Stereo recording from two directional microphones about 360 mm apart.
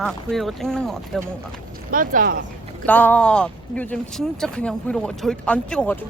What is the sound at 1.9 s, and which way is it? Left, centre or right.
Speech, right.